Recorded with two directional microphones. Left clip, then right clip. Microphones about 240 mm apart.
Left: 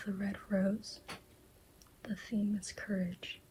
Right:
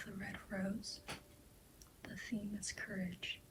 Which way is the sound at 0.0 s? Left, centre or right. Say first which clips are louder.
Left 6 dB; left.